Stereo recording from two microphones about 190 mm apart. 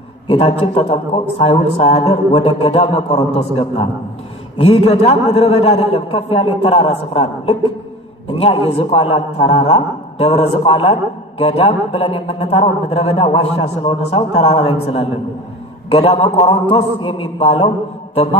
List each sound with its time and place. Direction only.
0.3 s a man's voice: 30° left (ahead or behind)
18.1 s mantra: 30° left (ahead or behind)